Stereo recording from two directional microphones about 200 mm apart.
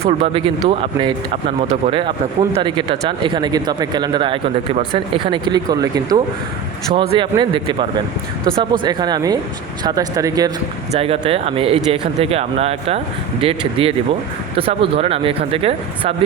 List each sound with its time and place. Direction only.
0.0 s speech: 30° right (ahead or behind)
10.9 s speech: 30° right (ahead or behind)